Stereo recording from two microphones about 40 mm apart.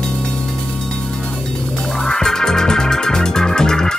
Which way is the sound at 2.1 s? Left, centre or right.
Centre.